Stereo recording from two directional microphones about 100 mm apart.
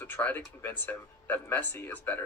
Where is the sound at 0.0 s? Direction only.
15° left (ahead or behind).